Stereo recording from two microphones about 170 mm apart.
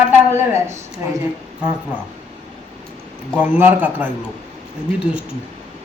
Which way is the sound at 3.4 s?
10° right (ahead or behind).